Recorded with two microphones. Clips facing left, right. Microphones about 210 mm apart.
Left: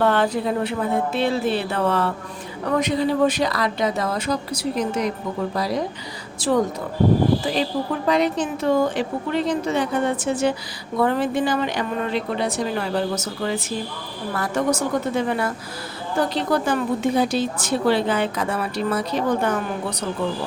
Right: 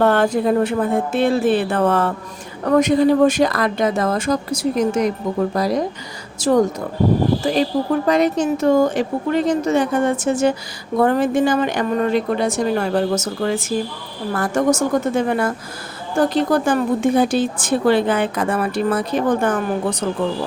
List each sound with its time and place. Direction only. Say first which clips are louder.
0.0 s a woman's voice: right 4 dB; 50° right (ahead or behind)
8.0 s a woman's voice: right 1 dB; 45° right (ahead or behind)